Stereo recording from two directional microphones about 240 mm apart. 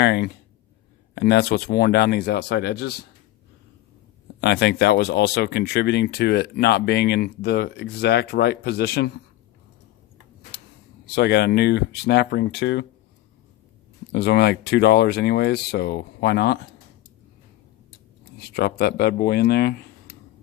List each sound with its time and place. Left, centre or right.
0.0 s speech: left
4.4 s speech: left
10.5 s a sound: left
11.0 s speech: left
14.1 s speech: left
18.3 s speech: left